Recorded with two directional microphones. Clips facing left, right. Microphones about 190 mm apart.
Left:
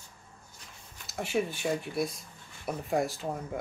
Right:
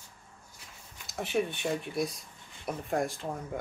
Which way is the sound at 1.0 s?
Centre (ahead or behind).